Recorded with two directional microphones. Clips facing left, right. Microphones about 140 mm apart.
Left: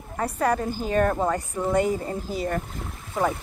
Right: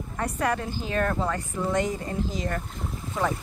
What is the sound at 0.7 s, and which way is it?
Speech, 45° left (ahead or behind).